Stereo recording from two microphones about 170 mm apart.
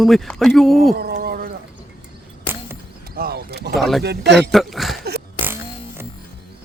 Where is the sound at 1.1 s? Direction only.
60° right (ahead or behind).